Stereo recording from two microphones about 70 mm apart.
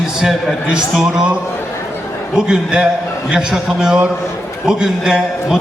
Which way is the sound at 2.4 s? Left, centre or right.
Centre.